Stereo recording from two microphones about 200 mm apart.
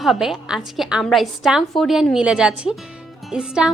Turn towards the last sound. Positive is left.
turn(degrees=-5)  # may be behind; listen again after turning